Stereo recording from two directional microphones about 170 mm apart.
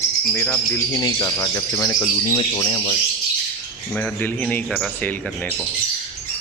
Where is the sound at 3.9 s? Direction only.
5° left (ahead or behind).